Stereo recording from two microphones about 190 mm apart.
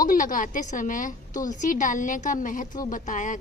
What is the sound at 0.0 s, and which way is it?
A woman's voice, 45° left (ahead or behind).